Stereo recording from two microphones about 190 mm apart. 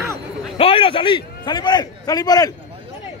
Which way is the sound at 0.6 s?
30° left (ahead or behind).